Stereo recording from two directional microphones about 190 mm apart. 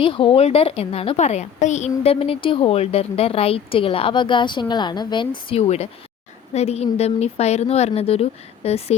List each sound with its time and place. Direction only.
0.0 s a woman's voice: 30° left (ahead or behind)